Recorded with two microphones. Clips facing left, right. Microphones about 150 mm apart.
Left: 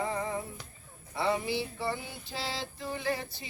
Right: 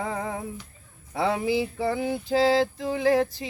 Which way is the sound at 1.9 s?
90° right.